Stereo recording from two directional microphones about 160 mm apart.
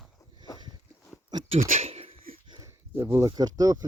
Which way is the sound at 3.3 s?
25° right (ahead or behind).